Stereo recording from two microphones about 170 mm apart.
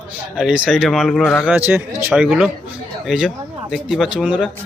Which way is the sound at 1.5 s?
10° right (ahead or behind).